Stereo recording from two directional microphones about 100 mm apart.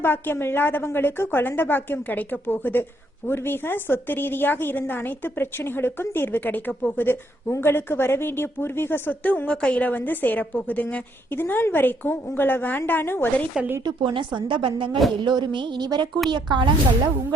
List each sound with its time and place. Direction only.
0.0 s a woman's voice: 20° left (ahead or behind)
13.6 s speech: 20° right (ahead or behind)
13.8 s a woman's voice: 55° right (ahead or behind)